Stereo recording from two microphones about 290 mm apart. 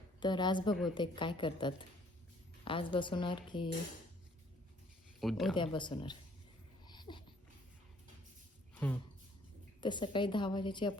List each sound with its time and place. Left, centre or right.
0.2 s a woman's voice: centre
5.2 s speech: centre
5.5 s a woman's voice: centre
6.8 s a sound: centre
8.8 s speech: centre
9.8 s a woman's voice: centre